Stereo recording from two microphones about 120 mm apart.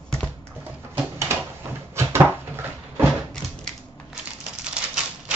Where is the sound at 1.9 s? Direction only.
20° right (ahead or behind).